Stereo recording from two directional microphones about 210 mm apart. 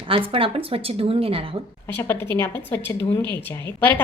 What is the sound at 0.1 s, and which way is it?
A woman's voice, 25° right (ahead or behind).